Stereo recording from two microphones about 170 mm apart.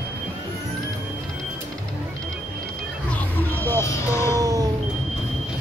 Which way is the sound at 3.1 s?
10° left (ahead or behind).